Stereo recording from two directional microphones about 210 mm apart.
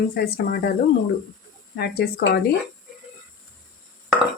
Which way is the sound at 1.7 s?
50° left (ahead or behind).